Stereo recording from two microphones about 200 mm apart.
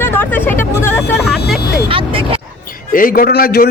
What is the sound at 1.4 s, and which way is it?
Speech, 55° left (ahead or behind).